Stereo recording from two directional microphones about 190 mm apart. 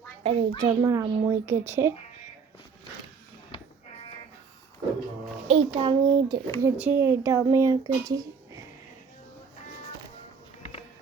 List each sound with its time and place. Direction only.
0.2 s a child's voice: 30° right (ahead or behind)
0.6 s a child's voice: 20° right (ahead or behind)
3.5 s music: 20° left (ahead or behind)
5.5 s a child's voice: 30° right (ahead or behind)
6.6 s speech: 10° right (ahead or behind)